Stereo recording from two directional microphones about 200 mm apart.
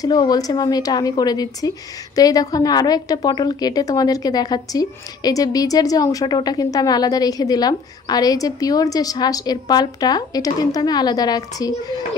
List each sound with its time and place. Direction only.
0.0 s a woman's voice: 20° left (ahead or behind)